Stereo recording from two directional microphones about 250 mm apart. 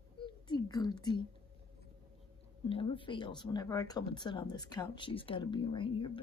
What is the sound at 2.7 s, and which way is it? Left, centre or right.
Speech, left.